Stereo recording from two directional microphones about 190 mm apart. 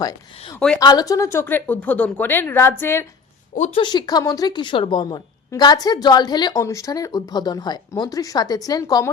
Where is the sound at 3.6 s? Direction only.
25° left (ahead or behind).